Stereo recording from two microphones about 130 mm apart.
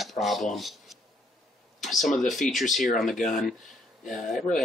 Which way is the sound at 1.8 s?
Centre (ahead or behind).